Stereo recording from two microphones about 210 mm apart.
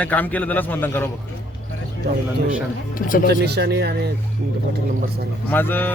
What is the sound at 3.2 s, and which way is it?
Speech, 50° right (ahead or behind).